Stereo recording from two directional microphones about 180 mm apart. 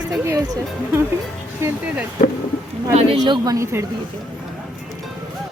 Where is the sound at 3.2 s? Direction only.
25° right (ahead or behind).